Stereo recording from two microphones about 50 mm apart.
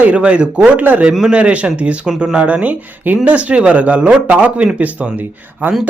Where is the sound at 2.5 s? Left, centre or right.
Right.